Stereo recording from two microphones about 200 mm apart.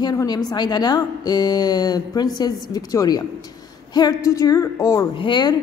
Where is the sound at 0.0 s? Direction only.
20° left (ahead or behind).